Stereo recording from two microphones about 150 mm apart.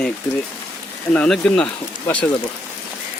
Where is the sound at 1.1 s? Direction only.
10° left (ahead or behind).